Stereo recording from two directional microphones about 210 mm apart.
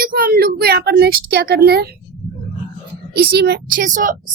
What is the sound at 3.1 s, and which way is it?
A woman's voice, 50° right (ahead or behind).